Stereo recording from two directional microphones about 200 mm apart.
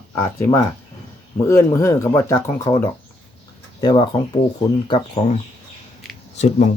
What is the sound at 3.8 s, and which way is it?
Speech, 20° left (ahead or behind).